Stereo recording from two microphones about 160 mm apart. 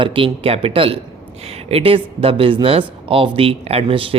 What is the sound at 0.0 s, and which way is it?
Speech, 35° right (ahead or behind).